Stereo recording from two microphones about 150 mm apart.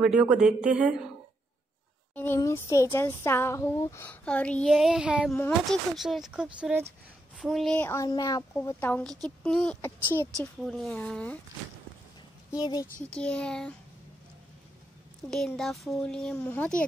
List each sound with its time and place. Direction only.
0.0 s a woman's voice: 10° right (ahead or behind)
2.1 s speech: 15° left (ahead or behind); by 6.9 s 10° right (ahead or behind)
7.3 s speech: centre (ahead or behind)
7.8 s speech: 20° left (ahead or behind)
8.7 s speech: 10° left (ahead or behind)
12.4 s speech: 25° left (ahead or behind)
13.0 s speech: 5° left (ahead or behind)
15.2 s speech: 5° left (ahead or behind)